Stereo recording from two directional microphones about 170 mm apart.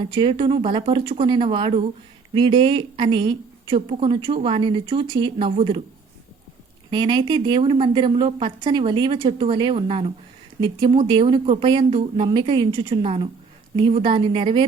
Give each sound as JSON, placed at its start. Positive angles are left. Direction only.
{"t": 0.0, "sound": "a woman's voice", "side_deg": -25}
{"t": 6.9, "sound": "a woman's voice", "side_deg": -25}